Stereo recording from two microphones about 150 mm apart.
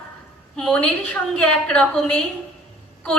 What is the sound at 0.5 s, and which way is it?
A woman's voice, 10° left (ahead or behind).